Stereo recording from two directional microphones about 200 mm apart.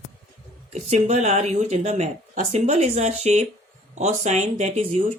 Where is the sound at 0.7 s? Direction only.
35° right (ahead or behind).